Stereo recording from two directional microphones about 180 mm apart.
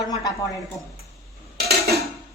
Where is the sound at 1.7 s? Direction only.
60° right (ahead or behind).